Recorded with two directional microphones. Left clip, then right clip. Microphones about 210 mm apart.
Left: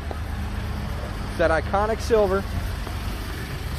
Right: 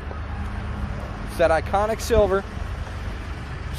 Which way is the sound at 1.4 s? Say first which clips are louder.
Right 2 dB; 10° right (ahead or behind).